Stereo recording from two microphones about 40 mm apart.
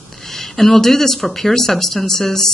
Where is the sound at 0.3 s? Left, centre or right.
Centre.